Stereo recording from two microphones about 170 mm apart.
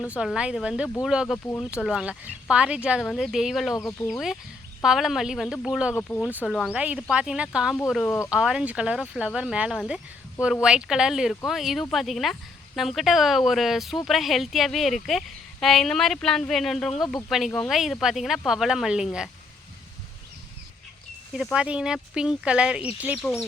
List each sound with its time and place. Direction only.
0.1 s speech: 5° right (ahead or behind)
5.9 s speech: 10° left (ahead or behind)
6.3 s speech: centre (ahead or behind)
8.0 s speech: 15° left (ahead or behind)
8.3 s speech: 5° right (ahead or behind)
21.3 s speech: 5° right (ahead or behind)